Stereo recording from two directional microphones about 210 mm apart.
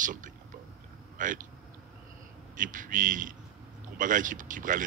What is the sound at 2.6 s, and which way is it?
Speech, 40° right (ahead or behind).